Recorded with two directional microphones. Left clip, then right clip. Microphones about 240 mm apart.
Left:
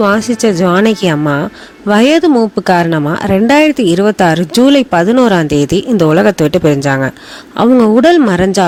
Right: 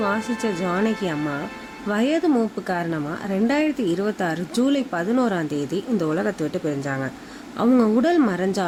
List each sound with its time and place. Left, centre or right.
0.0 s speech: left